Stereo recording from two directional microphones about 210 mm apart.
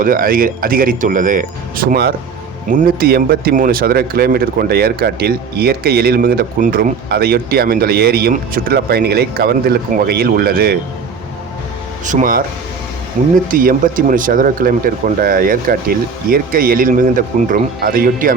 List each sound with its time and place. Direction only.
0.0 s speech: 40° right (ahead or behind)
12.0 s speech: 40° right (ahead or behind)